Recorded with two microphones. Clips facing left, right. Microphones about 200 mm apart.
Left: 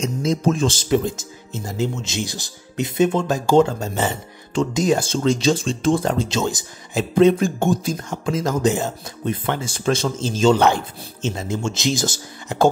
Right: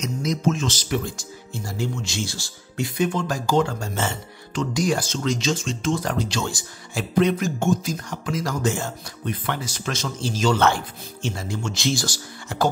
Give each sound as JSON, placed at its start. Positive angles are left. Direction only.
{"t": 0.0, "sound": "speech", "side_deg": 30}